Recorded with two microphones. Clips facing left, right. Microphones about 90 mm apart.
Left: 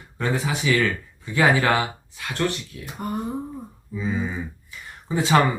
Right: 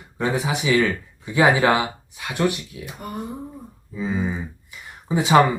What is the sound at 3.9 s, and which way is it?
Speech, 20° right (ahead or behind).